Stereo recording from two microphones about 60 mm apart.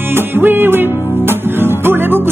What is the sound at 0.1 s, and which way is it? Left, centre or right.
Music, right.